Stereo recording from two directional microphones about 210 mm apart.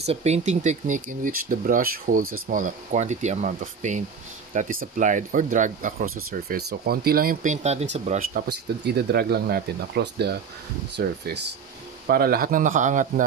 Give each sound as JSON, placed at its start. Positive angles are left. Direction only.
{"t": 0.0, "sound": "speech", "side_deg": -30}